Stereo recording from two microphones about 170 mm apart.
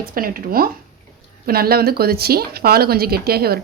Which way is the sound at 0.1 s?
55° right (ahead or behind).